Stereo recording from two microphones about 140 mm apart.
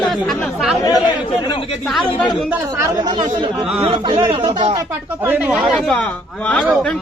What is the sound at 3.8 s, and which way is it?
Speech, 40° right (ahead or behind).